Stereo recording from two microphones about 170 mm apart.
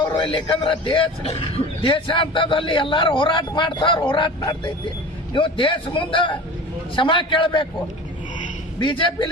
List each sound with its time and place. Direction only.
0.2 s a man's voice: 30° left (ahead or behind)
8.8 s a man's voice: 30° left (ahead or behind)